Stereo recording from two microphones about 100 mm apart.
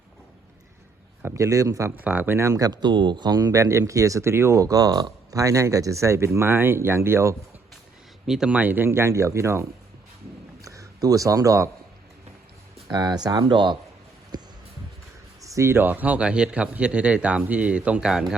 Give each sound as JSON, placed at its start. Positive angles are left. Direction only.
{"t": 1.2, "sound": "speech", "side_deg": -30}
{"t": 2.0, "sound": "speech", "side_deg": -15}
{"t": 2.5, "sound": "speech", "side_deg": -40}
{"t": 8.3, "sound": "speech", "side_deg": -10}
{"t": 12.9, "sound": "speech", "side_deg": -40}
{"t": 14.3, "sound": "music", "side_deg": -45}
{"t": 15.4, "sound": "a man's voice", "side_deg": -30}